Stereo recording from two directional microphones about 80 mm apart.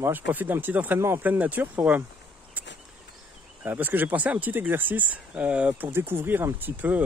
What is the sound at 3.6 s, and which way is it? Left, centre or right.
Speech, right.